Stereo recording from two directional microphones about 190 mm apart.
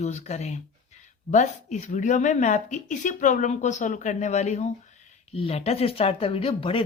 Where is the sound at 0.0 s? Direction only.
35° left (ahead or behind).